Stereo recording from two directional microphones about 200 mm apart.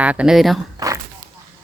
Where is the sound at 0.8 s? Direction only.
20° right (ahead or behind).